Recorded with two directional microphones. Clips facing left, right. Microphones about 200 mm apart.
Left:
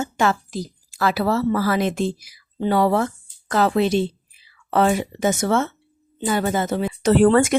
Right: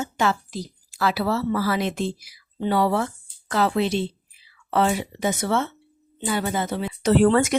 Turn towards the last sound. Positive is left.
turn(degrees=50)  # may be behind; listen again after turning